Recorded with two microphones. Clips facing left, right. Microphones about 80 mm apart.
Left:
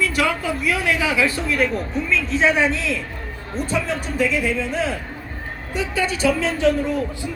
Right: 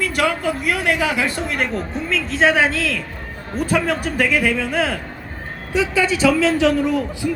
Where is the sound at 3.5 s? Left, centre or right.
Right.